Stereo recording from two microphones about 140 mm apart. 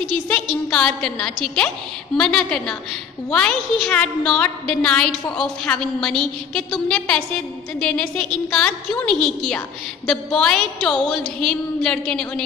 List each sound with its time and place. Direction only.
0.1 s a woman's voice: 5° left (ahead or behind)